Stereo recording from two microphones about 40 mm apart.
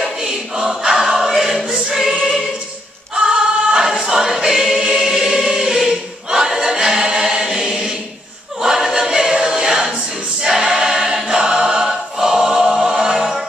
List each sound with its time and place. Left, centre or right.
0.0 s choir: centre
3.2 s choir: centre